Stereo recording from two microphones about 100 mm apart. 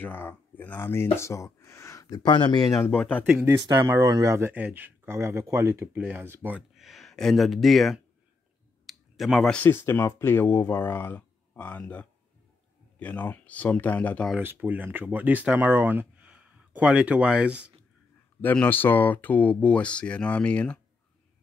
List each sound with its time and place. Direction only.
0.0 s speech: 20° left (ahead or behind); by 2.8 s 45° left (ahead or behind)
3.0 s speech: 15° left (ahead or behind)
3.4 s speech: 30° right (ahead or behind)
4.5 s speech: 15° right (ahead or behind)
5.1 s speech: 30° right (ahead or behind)
5.9 s speech: 15° right (ahead or behind)
6.7 s speech: centre (ahead or behind)
8.8 s clicking: centre (ahead or behind)
9.6 s speech: 25° left (ahead or behind)
14.4 s speech: 20° right (ahead or behind)
18.4 s speech: 20° left (ahead or behind)